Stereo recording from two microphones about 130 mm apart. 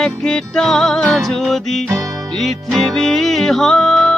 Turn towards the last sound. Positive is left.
turn(degrees=5)  # may be behind; listen again after turning